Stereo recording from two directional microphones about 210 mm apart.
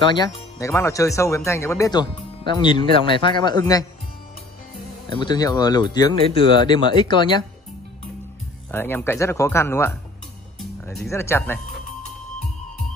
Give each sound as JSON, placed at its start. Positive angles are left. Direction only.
{"t": 0.1, "sound": "speech", "side_deg": 15}
{"t": 5.1, "sound": "speech", "side_deg": 20}
{"t": 8.7, "sound": "speech", "side_deg": 10}
{"t": 11.1, "sound": "speech", "side_deg": 10}